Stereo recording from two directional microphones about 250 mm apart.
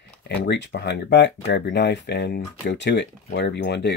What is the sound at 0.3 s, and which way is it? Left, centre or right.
Speech, left.